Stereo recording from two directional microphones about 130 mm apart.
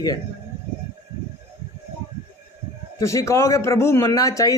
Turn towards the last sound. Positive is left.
turn(degrees=25)  # may be behind; listen again after turning